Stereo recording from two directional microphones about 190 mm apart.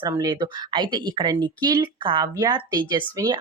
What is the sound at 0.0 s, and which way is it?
A woman's voice, 20° right (ahead or behind).